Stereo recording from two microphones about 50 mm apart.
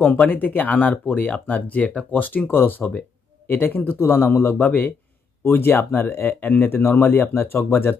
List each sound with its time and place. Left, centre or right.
0.0 s speech: left
5.5 s speech: left